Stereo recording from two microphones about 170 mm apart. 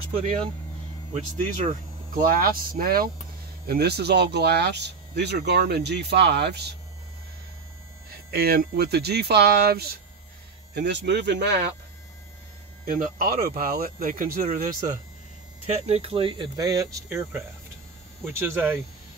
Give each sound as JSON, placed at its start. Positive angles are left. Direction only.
{"t": 1.1, "sound": "speech", "side_deg": -45}
{"t": 8.1, "sound": "speech", "side_deg": -60}
{"t": 10.7, "sound": "speech", "side_deg": -85}
{"t": 13.0, "sound": "speech", "side_deg": -60}
{"t": 15.7, "sound": "speech", "side_deg": -35}